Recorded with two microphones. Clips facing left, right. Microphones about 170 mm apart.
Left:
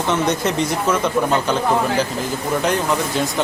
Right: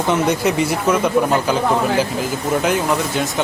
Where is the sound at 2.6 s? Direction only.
5° right (ahead or behind).